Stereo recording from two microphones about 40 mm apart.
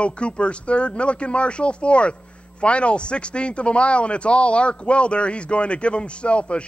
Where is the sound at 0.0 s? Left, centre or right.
Left.